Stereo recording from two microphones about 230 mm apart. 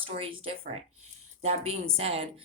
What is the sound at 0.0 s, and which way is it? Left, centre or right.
Speech, right.